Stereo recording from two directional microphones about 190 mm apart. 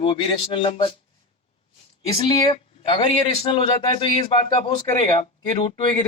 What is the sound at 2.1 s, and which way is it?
A man's voice, 25° left (ahead or behind).